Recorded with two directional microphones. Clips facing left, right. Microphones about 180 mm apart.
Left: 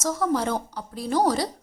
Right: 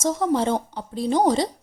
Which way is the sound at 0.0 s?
25° right (ahead or behind).